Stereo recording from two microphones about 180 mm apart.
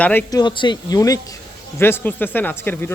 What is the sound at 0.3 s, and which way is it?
Speech, 20° left (ahead or behind).